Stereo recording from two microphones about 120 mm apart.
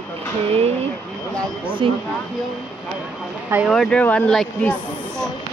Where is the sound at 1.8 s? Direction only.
45° right (ahead or behind).